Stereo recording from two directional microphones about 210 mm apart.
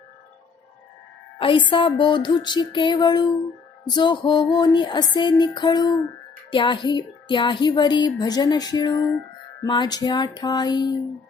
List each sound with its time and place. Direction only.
1.4 s music: 25° left (ahead or behind)
1.7 s speech: 25° left (ahead or behind)